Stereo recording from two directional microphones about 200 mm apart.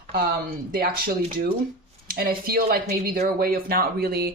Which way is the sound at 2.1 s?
50° right (ahead or behind).